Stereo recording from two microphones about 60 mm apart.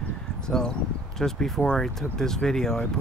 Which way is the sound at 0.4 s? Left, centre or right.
Centre.